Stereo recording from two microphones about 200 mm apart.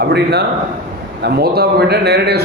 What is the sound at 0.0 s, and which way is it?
A man's voice, 55° right (ahead or behind).